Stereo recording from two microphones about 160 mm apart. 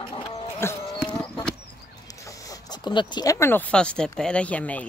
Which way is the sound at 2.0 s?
20° left (ahead or behind).